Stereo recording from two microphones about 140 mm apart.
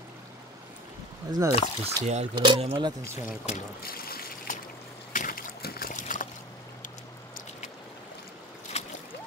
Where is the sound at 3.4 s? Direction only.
80° left.